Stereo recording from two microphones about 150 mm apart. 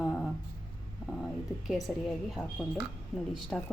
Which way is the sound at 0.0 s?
5° right (ahead or behind).